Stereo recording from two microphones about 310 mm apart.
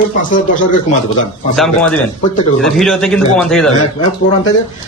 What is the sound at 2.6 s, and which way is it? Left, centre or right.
A man's voice, centre.